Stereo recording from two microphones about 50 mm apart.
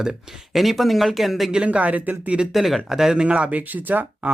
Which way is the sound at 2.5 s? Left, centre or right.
Centre.